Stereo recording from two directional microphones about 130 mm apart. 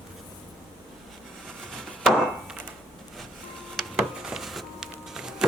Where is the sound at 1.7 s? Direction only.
Centre (ahead or behind).